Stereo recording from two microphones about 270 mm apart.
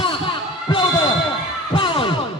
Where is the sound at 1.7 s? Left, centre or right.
Centre.